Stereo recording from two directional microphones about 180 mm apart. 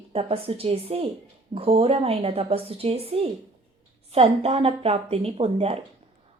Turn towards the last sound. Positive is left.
turn(degrees=-35)  # may be behind; listen again after turning